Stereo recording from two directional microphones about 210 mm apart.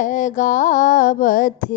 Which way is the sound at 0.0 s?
35° left (ahead or behind).